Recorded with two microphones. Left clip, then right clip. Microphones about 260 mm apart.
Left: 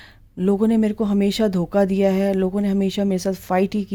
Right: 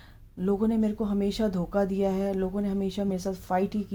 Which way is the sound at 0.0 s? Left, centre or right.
Left.